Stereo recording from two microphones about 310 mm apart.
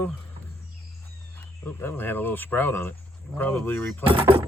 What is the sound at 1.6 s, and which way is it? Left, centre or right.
Speech, centre.